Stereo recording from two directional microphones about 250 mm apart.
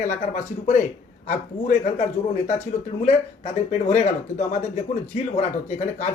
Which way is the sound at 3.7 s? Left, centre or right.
Left.